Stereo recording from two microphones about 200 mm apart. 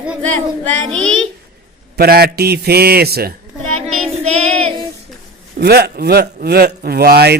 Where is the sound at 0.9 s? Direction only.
85° right.